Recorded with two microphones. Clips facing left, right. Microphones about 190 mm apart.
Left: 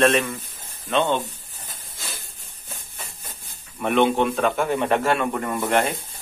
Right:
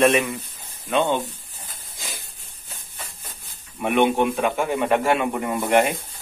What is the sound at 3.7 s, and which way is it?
A man's voice, 15° right (ahead or behind).